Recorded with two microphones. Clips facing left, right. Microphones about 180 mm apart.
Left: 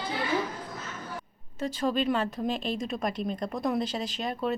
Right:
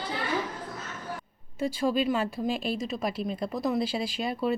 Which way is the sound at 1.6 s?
10° right (ahead or behind).